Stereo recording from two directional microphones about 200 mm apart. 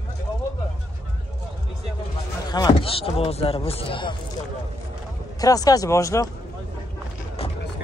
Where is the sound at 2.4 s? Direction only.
20° left (ahead or behind).